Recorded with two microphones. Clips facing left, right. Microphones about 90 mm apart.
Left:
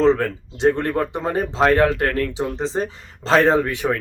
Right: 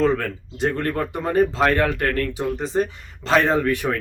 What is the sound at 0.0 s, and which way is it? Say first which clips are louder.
Speech: left 4 dB; 25° left (ahead or behind).